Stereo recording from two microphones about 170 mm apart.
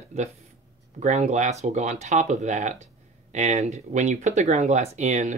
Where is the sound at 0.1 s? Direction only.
40° right (ahead or behind).